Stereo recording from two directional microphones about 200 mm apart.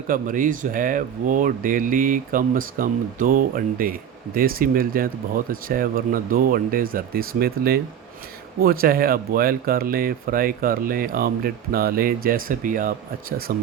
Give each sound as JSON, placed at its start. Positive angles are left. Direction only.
{"t": 0.1, "sound": "speech", "side_deg": -40}